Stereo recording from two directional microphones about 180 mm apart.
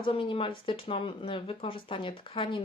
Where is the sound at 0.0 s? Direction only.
30° left (ahead or behind).